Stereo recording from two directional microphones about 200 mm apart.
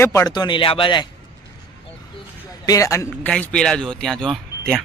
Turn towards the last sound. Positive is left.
turn(degrees=0)  # may be behind; listen again after turning